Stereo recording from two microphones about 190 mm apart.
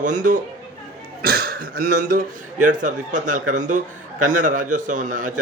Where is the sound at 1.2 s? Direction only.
55° right (ahead or behind).